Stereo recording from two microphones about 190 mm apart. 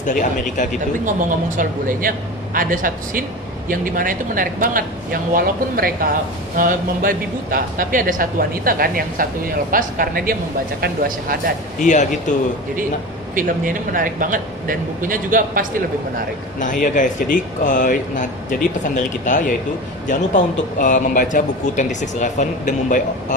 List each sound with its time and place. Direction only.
0.1 s speech: 40° left (ahead or behind)
1.5 s speech: 45° right (ahead or behind)
11.8 s speech: 40° left (ahead or behind)
13.3 s speech: 45° right (ahead or behind)
16.8 s a man's voice: 40° left (ahead or behind)